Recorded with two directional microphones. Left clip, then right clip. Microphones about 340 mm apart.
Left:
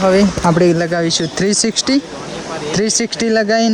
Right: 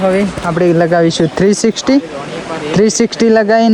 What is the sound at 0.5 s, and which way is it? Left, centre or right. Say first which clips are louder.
Speech: right 8 dB; centre.